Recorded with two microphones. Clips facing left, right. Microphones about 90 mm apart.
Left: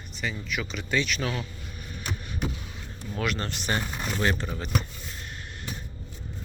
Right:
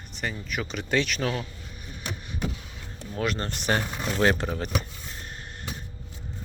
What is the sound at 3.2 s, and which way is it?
Speech, 35° right (ahead or behind).